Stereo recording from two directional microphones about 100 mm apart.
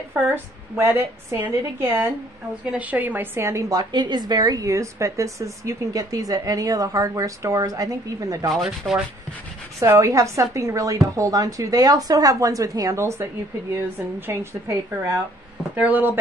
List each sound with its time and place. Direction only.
0.1 s a woman's voice: 25° right (ahead or behind)
3.9 s a woman's voice: 50° right (ahead or behind)
8.5 s sanding: centre (ahead or behind)
9.8 s a woman's voice: 30° right (ahead or behind)